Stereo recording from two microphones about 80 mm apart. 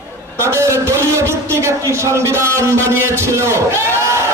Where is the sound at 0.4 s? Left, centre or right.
Right.